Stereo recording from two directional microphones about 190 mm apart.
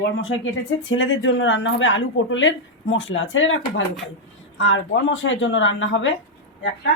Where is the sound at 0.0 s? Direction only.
75° left (ahead or behind).